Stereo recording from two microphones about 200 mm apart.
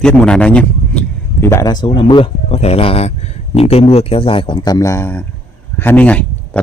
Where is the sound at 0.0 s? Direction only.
5° left (ahead or behind).